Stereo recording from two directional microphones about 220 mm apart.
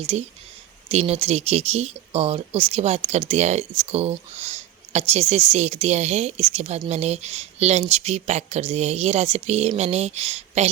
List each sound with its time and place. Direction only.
0.0 s speech: 25° right (ahead or behind)